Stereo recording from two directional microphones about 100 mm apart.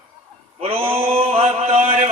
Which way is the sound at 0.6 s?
75° right (ahead or behind).